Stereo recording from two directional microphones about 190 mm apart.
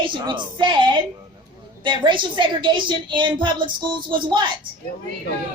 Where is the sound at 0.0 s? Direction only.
25° right (ahead or behind).